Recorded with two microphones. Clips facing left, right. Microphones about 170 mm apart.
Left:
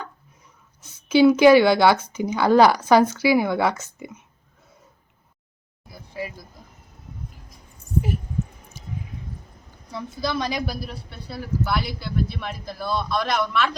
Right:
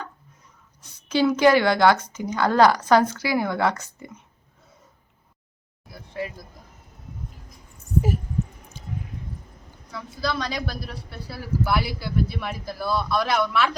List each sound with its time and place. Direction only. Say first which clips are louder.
0.8 s speech: left 6 dB; 5° left (ahead or behind)
5.9 s speech: right 1 dB; 5° left (ahead or behind)
9.9 s a woman's voice: left 1 dB; 20° left (ahead or behind)
10.8 s speech: even; 5° right (ahead or behind)